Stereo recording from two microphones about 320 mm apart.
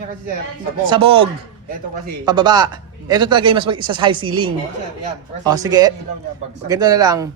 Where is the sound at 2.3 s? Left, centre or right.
Centre.